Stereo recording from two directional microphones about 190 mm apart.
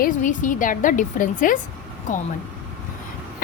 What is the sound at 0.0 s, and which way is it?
A woman's voice, 40° left (ahead or behind).